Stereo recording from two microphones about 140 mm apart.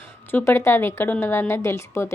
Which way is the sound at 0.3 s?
15° left (ahead or behind).